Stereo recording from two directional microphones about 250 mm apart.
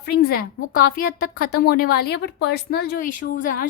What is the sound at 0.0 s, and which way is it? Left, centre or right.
A woman's voice, left.